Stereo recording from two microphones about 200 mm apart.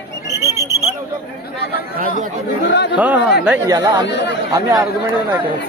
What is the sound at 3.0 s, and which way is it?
Speech, 5° right (ahead or behind).